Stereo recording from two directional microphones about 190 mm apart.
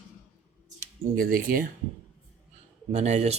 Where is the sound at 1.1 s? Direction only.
50° right (ahead or behind).